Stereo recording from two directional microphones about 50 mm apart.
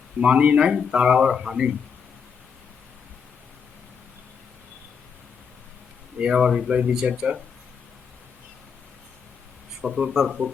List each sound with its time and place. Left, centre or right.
0.2 s a man's voice: right
6.1 s a man's voice: centre
9.8 s a man's voice: centre